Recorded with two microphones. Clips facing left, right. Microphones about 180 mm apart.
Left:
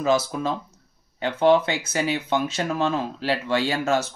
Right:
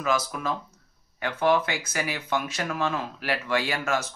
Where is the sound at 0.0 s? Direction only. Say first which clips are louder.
Left 5 dB; 30° left (ahead or behind).